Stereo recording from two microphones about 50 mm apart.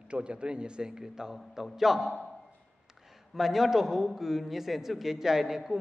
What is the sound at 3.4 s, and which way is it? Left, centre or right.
A man's voice, centre.